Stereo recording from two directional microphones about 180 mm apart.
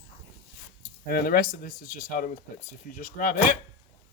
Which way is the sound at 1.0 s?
55° left (ahead or behind).